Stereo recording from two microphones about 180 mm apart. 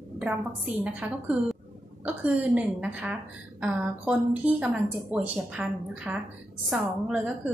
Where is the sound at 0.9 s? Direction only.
5° right (ahead or behind).